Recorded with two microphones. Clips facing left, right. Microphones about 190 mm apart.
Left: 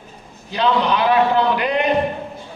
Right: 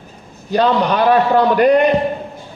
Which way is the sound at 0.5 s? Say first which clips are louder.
Right 4 dB; 45° right (ahead or behind).